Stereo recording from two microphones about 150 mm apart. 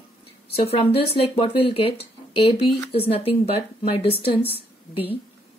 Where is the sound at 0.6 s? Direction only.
40° left (ahead or behind).